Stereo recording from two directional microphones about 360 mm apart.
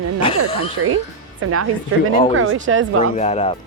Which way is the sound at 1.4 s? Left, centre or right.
Right.